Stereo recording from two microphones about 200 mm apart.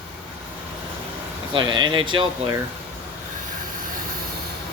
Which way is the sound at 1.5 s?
25° right (ahead or behind).